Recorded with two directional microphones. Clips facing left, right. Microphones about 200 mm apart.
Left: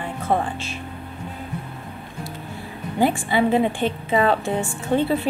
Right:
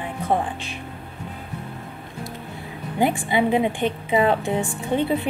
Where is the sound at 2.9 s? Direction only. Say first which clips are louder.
Left 1 dB; 20° right (ahead or behind).